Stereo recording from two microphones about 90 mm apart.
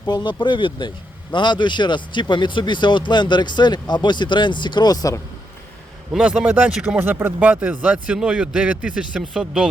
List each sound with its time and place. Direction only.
0.1 s speech: 55° left (ahead or behind)
6.1 s speech: 10° right (ahead or behind)
9.3 s speech: centre (ahead or behind)